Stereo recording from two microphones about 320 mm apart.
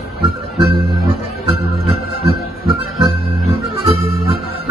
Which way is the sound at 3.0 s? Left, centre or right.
Centre.